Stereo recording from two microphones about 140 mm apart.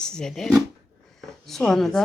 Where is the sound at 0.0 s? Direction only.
5° left (ahead or behind).